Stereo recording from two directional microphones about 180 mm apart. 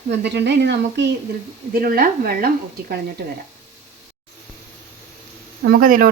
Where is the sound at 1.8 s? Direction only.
55° right (ahead or behind).